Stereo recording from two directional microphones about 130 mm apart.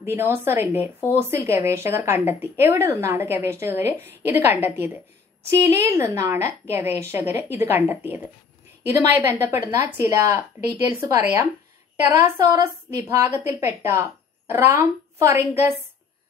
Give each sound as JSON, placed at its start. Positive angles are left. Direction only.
{"t": 0.0, "sound": "a woman's voice", "side_deg": -20}
{"t": 9.5, "sound": "a woman's voice", "side_deg": -20}